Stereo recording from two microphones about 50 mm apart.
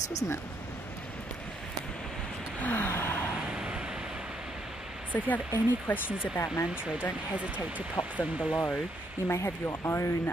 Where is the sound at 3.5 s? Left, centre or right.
Centre.